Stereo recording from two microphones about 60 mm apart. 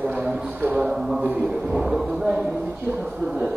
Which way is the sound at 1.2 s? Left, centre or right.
Right.